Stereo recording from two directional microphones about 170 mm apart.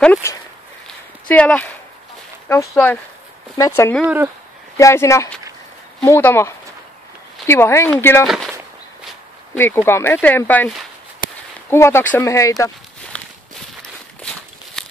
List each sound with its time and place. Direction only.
1.2 s speech: 10° left (ahead or behind)
4.0 s speech: 10° right (ahead or behind)
4.7 s speech: 20° left (ahead or behind)
8.3 s a sound: centre (ahead or behind)
9.6 s speech: 15° left (ahead or behind)
11.7 s speech: 15° left (ahead or behind)
13.1 s walk: 5° left (ahead or behind)